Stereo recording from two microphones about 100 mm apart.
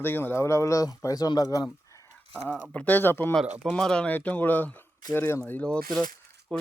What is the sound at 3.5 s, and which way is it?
Speech, 10° right (ahead or behind).